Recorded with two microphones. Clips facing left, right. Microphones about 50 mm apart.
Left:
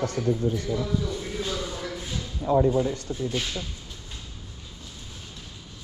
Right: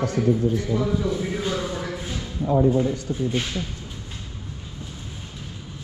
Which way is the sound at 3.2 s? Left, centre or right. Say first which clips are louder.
Right 3 dB; right.